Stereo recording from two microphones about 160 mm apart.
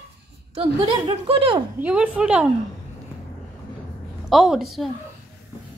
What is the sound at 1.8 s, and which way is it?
Speech, 10° right (ahead or behind).